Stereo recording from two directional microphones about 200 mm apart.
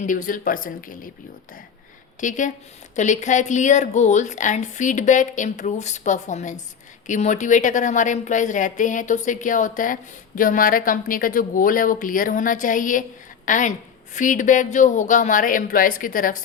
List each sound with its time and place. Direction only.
0.0 s speech: 40° left (ahead or behind)
2.2 s a woman's voice: 40° left (ahead or behind)